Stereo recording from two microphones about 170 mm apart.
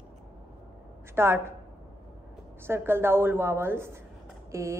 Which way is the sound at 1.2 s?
15° right (ahead or behind).